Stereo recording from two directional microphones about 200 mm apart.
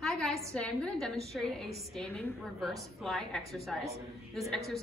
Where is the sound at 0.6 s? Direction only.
5° left (ahead or behind).